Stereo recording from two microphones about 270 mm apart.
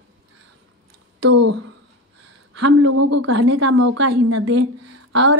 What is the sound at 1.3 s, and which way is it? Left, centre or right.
Speech, right.